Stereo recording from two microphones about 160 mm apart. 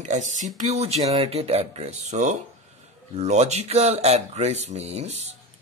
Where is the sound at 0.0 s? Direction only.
50° right (ahead or behind).